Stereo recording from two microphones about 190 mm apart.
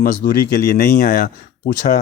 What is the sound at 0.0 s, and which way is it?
Speech, 45° left (ahead or behind).